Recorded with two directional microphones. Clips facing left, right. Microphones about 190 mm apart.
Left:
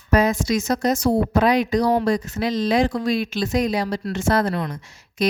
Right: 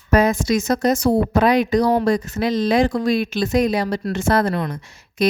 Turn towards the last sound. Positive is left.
turn(degrees=-60)  # may be behind; listen again after turning